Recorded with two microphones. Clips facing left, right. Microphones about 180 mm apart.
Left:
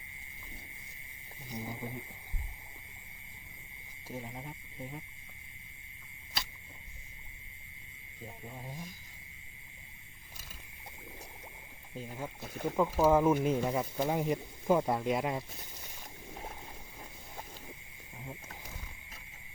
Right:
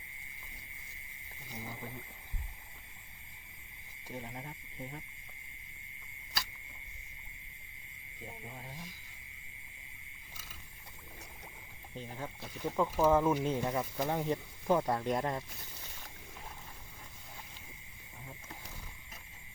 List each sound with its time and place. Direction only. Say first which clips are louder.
1.5 s speech: left 4 dB; 15° left (ahead or behind)
4.1 s speech: left 1 dB; 5° left (ahead or behind)
11.9 s speech: left 2 dB; 10° left (ahead or behind)